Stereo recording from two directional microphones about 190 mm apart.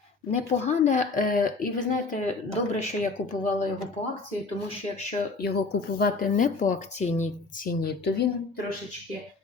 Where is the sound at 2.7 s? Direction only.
40° left (ahead or behind).